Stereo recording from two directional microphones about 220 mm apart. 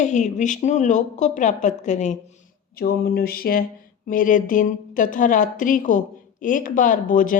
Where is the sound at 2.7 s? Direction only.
45° left (ahead or behind).